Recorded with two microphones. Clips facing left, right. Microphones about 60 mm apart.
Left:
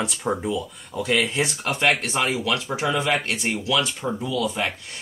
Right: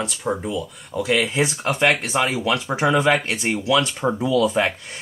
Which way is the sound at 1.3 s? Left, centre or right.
Centre.